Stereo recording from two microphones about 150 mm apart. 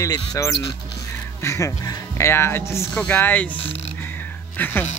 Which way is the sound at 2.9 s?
5° left (ahead or behind).